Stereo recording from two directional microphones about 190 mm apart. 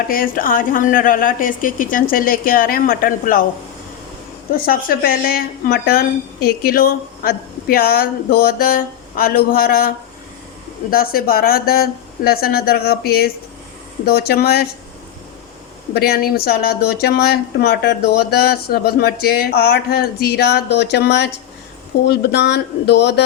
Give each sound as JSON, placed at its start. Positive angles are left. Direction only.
{"t": 0.1, "sound": "a woman's voice", "side_deg": 50}
{"t": 4.6, "sound": "a woman's voice", "side_deg": 50}
{"t": 10.9, "sound": "a woman's voice", "side_deg": 50}
{"t": 16.0, "sound": "speech", "side_deg": 55}